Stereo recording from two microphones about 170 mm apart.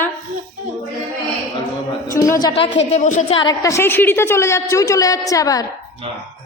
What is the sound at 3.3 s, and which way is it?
A woman's voice, 25° left (ahead or behind).